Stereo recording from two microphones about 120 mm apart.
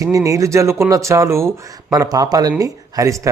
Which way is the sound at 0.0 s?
30° right (ahead or behind).